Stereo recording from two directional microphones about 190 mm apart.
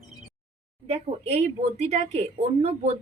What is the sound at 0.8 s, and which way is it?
Speech, 35° right (ahead or behind).